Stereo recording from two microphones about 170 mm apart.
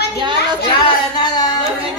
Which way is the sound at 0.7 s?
25° left (ahead or behind).